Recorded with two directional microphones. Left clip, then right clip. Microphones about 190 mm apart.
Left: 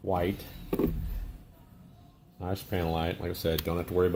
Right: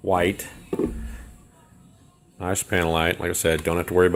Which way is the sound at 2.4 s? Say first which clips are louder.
Right 10 dB; 40° right (ahead or behind).